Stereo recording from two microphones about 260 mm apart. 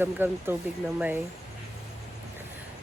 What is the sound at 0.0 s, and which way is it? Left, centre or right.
Speech, centre.